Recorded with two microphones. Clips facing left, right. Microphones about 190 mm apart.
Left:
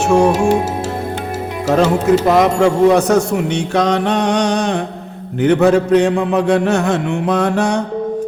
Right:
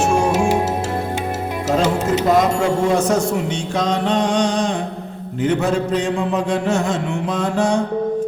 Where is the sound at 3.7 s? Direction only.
65° left (ahead or behind).